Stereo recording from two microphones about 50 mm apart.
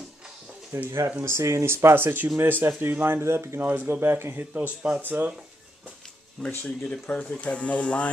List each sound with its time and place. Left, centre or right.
0.7 s speech: right
2.2 s speech: right
3.6 s speech: right
4.6 s speech: right
5.0 s speech: right
6.4 s speech: left